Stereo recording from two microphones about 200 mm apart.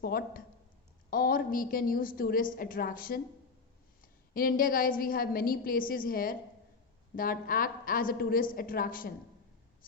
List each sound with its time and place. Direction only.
0.0 s a woman's voice: 50° left (ahead or behind)